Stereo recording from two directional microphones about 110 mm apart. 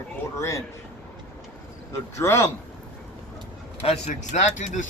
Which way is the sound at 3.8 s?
90° left.